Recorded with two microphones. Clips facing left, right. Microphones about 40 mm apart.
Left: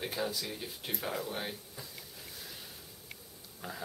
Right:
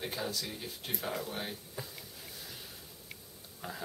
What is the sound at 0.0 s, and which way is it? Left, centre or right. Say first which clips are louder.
Speech: left 2 dB; centre.